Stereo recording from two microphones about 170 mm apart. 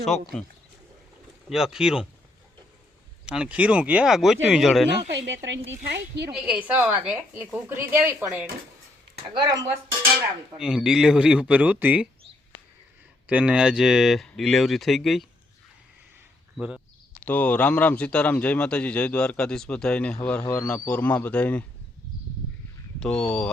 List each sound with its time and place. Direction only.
0.0 s speech: centre (ahead or behind)
1.5 s speech: centre (ahead or behind)
3.2 s speech: 5° right (ahead or behind)
5.1 s speech: 90° right
5.9 s speech: 80° right
6.3 s speech: 5° right (ahead or behind)
9.3 s speech: 20° right (ahead or behind)
10.6 s speech: 5° right (ahead or behind)
13.2 s speech: 10° right (ahead or behind)
16.6 s speech: 5° right (ahead or behind)
17.2 s a man's voice: 10° left (ahead or behind)
23.0 s speech: 5° left (ahead or behind)